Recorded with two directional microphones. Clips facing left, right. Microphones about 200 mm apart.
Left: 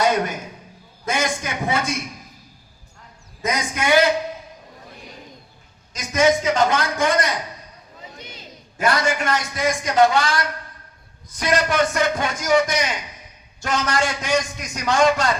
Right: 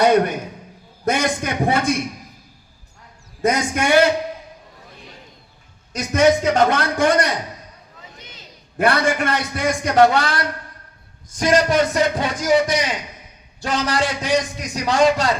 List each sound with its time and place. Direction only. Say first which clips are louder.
0.0 s a sound: right 5 dB; 60° right (ahead or behind)
1.0 s a man's voice: right 4 dB; 60° right (ahead or behind)
3.4 s a man's voice: right 5 dB; 55° right (ahead or behind)
5.9 s a man's voice: right 3 dB; 60° right (ahead or behind)
8.8 s a man's voice: right 3 dB; 60° right (ahead or behind)
11.3 s a man's voice: right 4 dB; 45° right (ahead or behind)